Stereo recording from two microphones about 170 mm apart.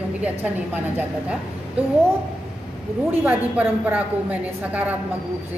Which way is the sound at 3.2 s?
10° right (ahead or behind).